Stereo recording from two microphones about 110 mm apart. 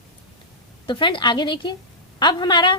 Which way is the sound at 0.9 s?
45° left (ahead or behind).